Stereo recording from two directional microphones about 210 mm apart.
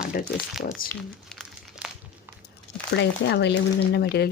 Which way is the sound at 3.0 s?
55° left (ahead or behind).